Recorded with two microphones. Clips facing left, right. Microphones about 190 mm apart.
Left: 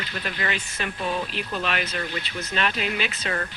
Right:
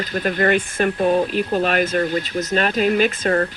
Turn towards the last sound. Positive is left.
turn(degrees=-45)  # may be behind; listen again after turning